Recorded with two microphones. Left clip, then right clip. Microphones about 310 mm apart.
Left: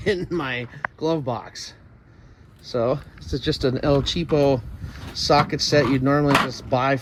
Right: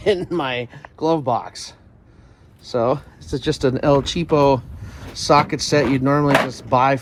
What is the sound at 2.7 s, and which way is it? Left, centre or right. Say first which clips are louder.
Speech: right 3 dB; centre.